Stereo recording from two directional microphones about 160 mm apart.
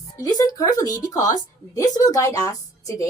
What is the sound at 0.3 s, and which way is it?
A woman's voice, 20° left (ahead or behind).